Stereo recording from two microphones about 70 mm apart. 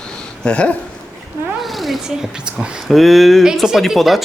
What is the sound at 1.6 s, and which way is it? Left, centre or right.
A woman's voice, centre.